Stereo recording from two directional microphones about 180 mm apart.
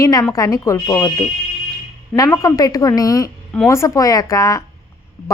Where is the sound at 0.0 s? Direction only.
20° left (ahead or behind).